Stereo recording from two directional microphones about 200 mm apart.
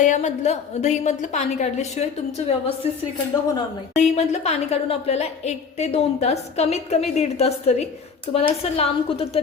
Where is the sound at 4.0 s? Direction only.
35° left (ahead or behind).